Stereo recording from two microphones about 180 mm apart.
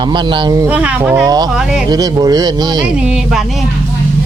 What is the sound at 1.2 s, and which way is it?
Speech, 20° right (ahead or behind).